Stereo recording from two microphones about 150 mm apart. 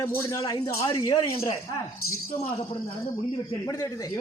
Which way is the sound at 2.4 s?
40° left (ahead or behind).